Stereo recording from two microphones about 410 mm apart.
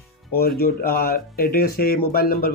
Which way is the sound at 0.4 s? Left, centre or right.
Left.